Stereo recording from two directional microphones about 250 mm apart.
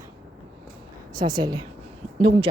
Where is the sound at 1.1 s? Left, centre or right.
Centre.